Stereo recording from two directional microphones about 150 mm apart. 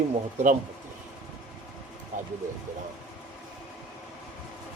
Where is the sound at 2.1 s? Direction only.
60° right (ahead or behind).